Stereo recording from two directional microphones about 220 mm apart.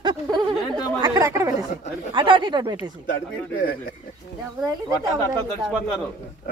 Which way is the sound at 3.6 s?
40° left (ahead or behind).